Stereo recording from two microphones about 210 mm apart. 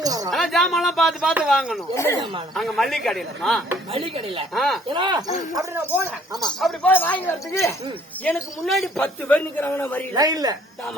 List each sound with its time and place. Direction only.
0.0 s a sound: 15° right (ahead or behind)
0.3 s speech: centre (ahead or behind)
3.9 s speech: 25° right (ahead or behind)
4.5 s speech: centre (ahead or behind)
4.9 s speech: 20° right (ahead or behind)
5.5 s speech: 10° right (ahead or behind); by 7.8 s 15° left (ahead or behind)
8.2 s a man's voice: centre (ahead or behind)
10.2 s speech: 20° right (ahead or behind)